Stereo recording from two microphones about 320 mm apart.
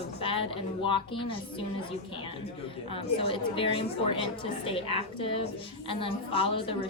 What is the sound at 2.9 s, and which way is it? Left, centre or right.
A woman's voice, centre.